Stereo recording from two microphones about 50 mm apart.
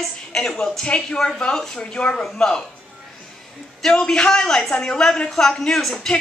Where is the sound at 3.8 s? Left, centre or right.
Centre.